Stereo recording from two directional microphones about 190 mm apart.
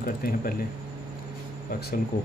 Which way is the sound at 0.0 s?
50° left (ahead or behind).